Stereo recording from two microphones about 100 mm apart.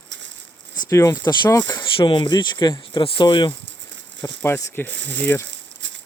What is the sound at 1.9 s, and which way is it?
Speech, 60° left (ahead or behind).